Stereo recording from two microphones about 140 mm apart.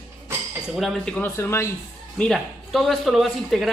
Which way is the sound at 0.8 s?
Centre (ahead or behind).